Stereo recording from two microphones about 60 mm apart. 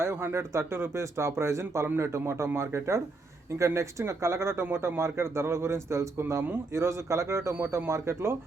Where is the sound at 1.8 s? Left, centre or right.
Right.